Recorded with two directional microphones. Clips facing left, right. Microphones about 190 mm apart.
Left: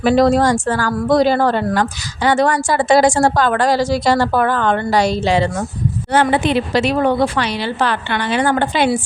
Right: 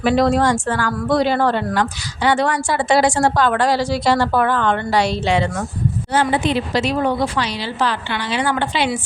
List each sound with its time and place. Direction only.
0.0 s a woman's voice: 40° left (ahead or behind)
6.1 s a woman's voice: 60° left (ahead or behind)